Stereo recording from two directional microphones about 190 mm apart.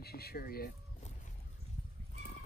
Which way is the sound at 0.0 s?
55° left (ahead or behind).